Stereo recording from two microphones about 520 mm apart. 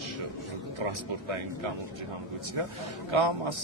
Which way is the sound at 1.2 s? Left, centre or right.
Right.